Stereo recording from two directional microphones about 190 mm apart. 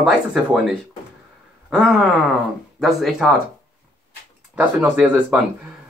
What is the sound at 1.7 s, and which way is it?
Speech, centre (ahead or behind).